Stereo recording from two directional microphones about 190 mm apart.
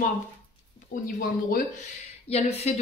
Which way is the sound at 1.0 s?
50° left (ahead or behind).